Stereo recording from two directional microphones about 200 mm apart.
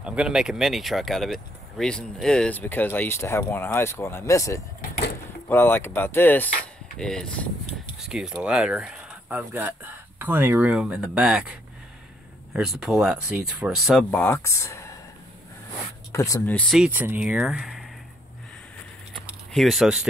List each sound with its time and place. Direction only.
0.0 s speech: 5° right (ahead or behind); by 4.6 s 15° left (ahead or behind)
4.8 s a sound: 50° left (ahead or behind)
5.5 s speech: 10° left (ahead or behind); by 11.5 s 5° right (ahead or behind)
12.5 s speech: 5° right (ahead or behind); by 15.0 s 15° left (ahead or behind)
16.1 s speech: 15° left (ahead or behind); by 17.8 s centre (ahead or behind)
19.2 s a sound: centre (ahead or behind)